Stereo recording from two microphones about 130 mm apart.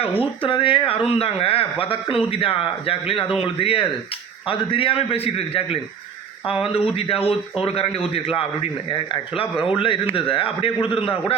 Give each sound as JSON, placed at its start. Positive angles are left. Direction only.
{"t": 0.0, "sound": "speech", "side_deg": 45}